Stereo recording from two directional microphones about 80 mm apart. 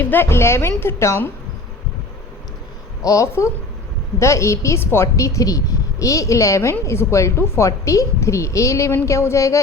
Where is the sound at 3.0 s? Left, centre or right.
Left.